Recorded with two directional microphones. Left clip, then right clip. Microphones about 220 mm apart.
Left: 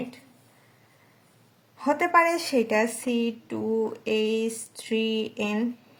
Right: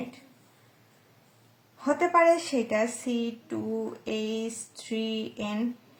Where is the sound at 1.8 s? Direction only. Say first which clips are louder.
Left 1 dB; 45° left (ahead or behind).